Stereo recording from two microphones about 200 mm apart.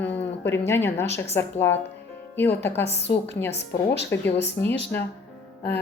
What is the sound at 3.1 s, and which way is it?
A woman's voice, 55° left (ahead or behind).